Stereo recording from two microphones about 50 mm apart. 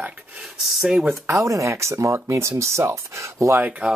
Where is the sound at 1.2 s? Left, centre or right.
Right.